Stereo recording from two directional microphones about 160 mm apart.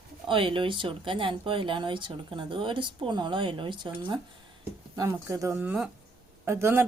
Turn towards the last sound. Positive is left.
turn(degrees=-15)  # may be behind; listen again after turning